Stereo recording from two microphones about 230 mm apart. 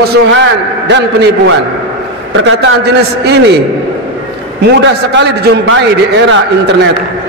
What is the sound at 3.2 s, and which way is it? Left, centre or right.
Speech, right.